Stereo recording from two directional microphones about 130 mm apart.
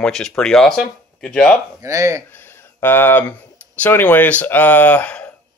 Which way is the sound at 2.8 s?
15° left (ahead or behind).